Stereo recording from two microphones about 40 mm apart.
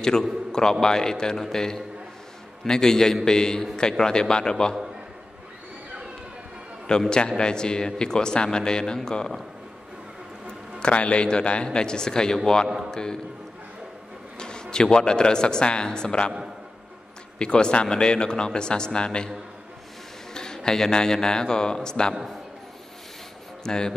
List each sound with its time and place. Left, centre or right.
0.1 s a man's voice: centre
7.1 s a man's voice: left
10.8 s a man's voice: left
14.4 s a man's voice: centre
17.4 s a man's voice: left
20.3 s a man's voice: centre
23.6 s speech: centre